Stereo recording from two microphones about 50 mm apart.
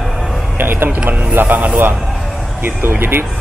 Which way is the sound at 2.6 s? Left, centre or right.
Right.